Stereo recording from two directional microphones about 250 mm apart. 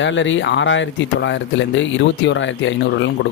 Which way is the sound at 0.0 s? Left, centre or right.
Left.